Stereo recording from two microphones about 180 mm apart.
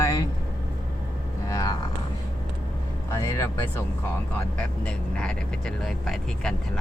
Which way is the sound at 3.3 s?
15° left (ahead or behind).